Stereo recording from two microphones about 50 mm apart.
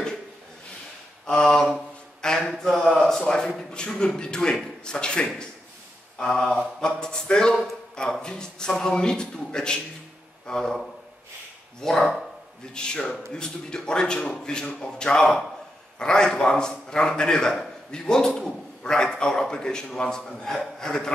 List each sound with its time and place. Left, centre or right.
1.2 s mantra: centre
2.2 s a sound: centre
3.2 s a man's voice: centre
12.7 s a man's voice: centre